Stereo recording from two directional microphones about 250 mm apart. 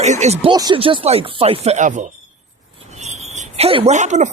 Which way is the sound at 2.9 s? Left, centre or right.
Right.